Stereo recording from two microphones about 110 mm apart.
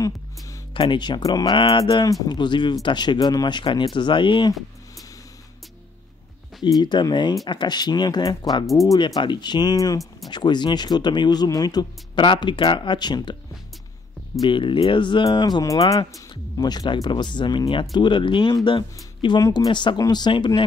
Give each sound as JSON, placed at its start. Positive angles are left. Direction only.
{"t": 0.7, "sound": "speech", "side_deg": 45}
{"t": 6.6, "sound": "speech", "side_deg": 45}
{"t": 14.4, "sound": "speech", "side_deg": 50}